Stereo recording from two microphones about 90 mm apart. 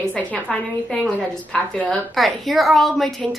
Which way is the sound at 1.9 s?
Centre (ahead or behind).